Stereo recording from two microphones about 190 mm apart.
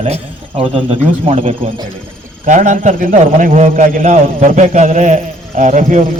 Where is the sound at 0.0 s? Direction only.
30° right (ahead or behind).